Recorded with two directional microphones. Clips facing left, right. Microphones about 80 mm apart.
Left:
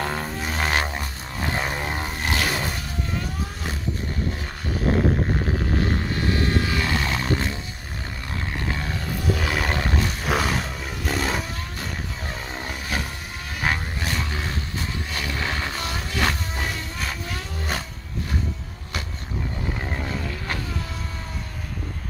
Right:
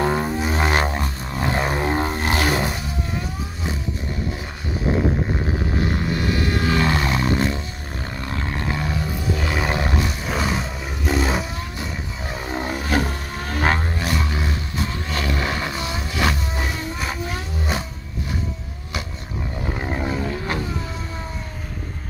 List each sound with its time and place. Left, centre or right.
0.0 s didgeridoo: centre
5.8 s vehicle: right
6.1 s vehicle: left
6.6 s roar: right
8.3 s a sound: right
9.4 s roar: centre
9.7 s roar: centre
10.2 s vehicle: centre
10.6 s a sound: centre
12.4 s a sound: right
12.7 s vehicle: right; by 17.8 s centre
19.8 s vehicle: centre